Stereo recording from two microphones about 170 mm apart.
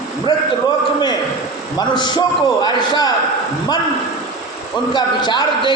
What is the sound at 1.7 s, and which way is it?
A man's voice, 25° left (ahead or behind).